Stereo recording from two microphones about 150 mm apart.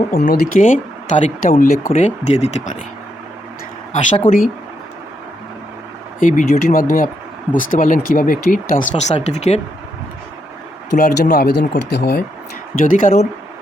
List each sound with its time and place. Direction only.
0.1 s speech: 75° left (ahead or behind)
1.9 s speech: 50° left (ahead or behind)
3.9 s speech: 50° left (ahead or behind)
6.1 s speech: 60° left (ahead or behind); by 9.6 s 45° left (ahead or behind)
10.9 s speech: 85° left
12.8 s speech: 60° left (ahead or behind)